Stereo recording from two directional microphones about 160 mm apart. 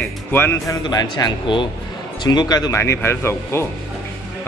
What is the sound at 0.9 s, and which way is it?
Speech, 25° left (ahead or behind).